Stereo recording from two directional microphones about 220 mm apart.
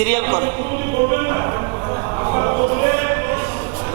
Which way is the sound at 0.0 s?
10° right (ahead or behind).